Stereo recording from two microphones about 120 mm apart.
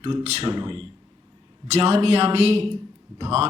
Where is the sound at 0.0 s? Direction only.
50° right (ahead or behind).